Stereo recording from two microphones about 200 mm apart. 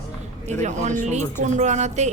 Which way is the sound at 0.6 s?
35° right (ahead or behind).